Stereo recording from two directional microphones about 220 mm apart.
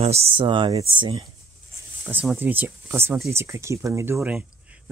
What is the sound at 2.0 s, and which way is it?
Speech, 10° right (ahead or behind).